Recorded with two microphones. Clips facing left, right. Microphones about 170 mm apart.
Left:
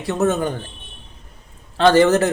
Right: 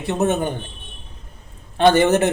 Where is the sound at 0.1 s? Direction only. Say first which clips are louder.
Left 1 dB; 20° right (ahead or behind).